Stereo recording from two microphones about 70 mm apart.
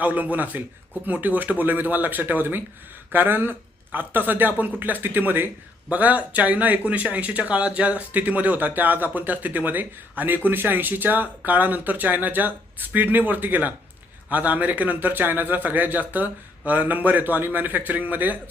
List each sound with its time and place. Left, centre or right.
0.0 s speech: right